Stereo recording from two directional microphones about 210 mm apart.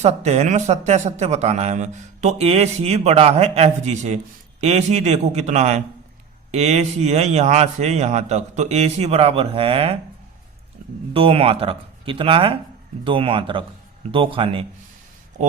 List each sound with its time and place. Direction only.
0.0 s speech: 30° right (ahead or behind)
11.1 s speech: 25° right (ahead or behind)